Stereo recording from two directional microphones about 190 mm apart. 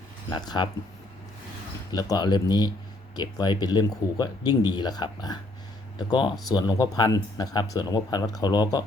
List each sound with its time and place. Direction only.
0.3 s speech: 20° left (ahead or behind)
1.9 s speech: 20° left (ahead or behind)